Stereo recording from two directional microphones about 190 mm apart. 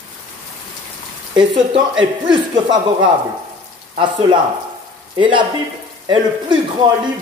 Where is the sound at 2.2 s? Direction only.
25° right (ahead or behind).